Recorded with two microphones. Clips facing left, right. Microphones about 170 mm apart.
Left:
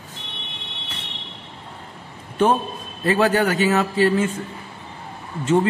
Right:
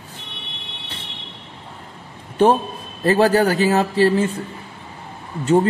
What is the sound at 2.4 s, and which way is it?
A man's voice, 35° right (ahead or behind).